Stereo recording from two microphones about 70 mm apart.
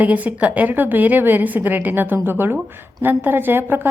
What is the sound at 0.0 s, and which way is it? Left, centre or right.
A woman's voice, right.